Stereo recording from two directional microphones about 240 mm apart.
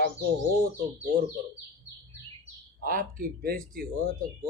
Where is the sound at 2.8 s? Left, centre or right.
Right.